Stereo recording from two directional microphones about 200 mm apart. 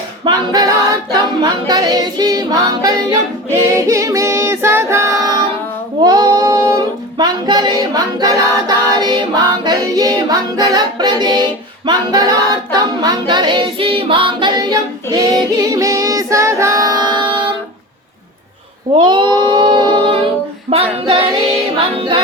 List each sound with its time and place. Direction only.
0.3 s a capella: 20° right (ahead or behind)
3.8 s music: 15° right (ahead or behind)
6.0 s child singing: 20° right (ahead or behind)
11.9 s a capella: 20° right (ahead or behind)
18.9 s female singing: 20° right (ahead or behind)
20.7 s music: 25° right (ahead or behind)